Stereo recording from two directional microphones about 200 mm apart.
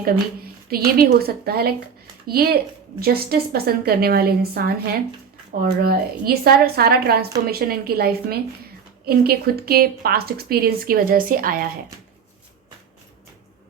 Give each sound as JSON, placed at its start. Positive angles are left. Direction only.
{"t": 0.7, "sound": "a woman's voice", "side_deg": -50}